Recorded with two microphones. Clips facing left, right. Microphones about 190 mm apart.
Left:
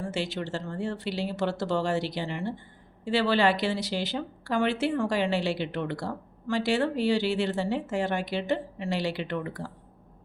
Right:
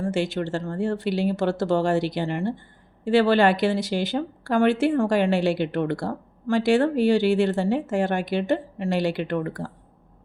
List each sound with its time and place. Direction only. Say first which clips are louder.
0.0 s a woman's voice: right 7 dB; 50° right (ahead or behind)